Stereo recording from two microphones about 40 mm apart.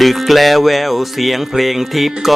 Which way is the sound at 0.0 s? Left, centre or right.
Centre.